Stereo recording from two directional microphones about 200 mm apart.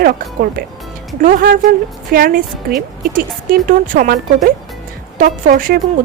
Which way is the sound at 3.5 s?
45° right (ahead or behind).